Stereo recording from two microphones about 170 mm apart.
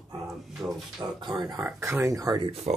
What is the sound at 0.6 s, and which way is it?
Speech, centre (ahead or behind).